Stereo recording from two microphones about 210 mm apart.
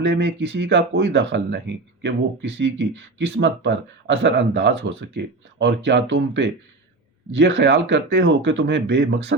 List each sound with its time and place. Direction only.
0.0 s speech: 55° right (ahead or behind)